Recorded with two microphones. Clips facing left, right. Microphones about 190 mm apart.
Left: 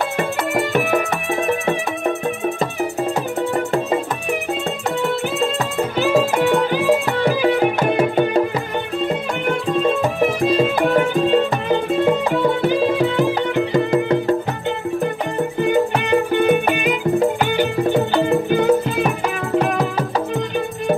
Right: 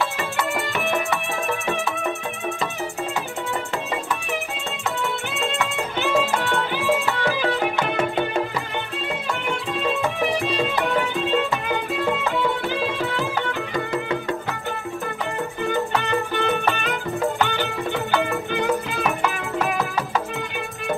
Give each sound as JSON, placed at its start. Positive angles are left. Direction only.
{"t": 0.2, "sound": "music", "side_deg": 55}
{"t": 3.5, "sound": "music", "side_deg": 50}
{"t": 5.6, "sound": "music", "side_deg": 40}
{"t": 6.3, "sound": "music", "side_deg": 15}
{"t": 6.7, "sound": "music", "side_deg": 40}
{"t": 7.2, "sound": "music", "side_deg": 15}
{"t": 7.6, "sound": "music", "side_deg": 35}
{"t": 10.4, "sound": "music", "side_deg": 45}
{"t": 12.9, "sound": "music", "side_deg": 15}
{"t": 13.9, "sound": "music", "side_deg": 35}
{"t": 15.7, "sound": "music", "side_deg": 15}
{"t": 18.1, "sound": "music", "side_deg": 30}